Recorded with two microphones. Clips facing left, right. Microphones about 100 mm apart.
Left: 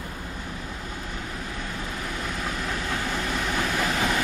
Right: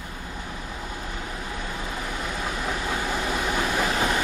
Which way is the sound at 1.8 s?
5° right (ahead or behind).